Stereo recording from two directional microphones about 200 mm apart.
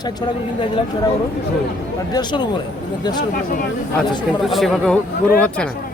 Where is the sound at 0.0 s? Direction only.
20° left (ahead or behind).